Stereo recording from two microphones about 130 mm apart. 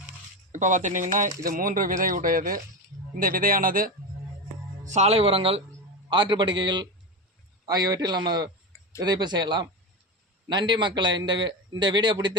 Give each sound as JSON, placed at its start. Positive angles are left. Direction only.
{"t": 0.5, "sound": "speech", "side_deg": -70}
{"t": 4.9, "sound": "a man's voice", "side_deg": -55}